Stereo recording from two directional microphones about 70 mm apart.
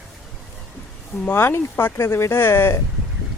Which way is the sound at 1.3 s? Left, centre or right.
Left.